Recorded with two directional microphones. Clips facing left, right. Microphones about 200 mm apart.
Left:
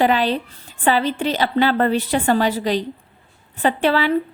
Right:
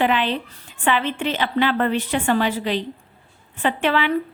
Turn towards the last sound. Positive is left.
turn(degrees=35)  # may be behind; listen again after turning